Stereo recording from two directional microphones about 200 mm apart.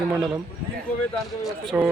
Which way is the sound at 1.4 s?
5° right (ahead or behind).